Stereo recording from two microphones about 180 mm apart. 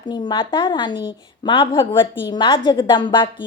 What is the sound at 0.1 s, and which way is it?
A woman's voice, 25° left (ahead or behind).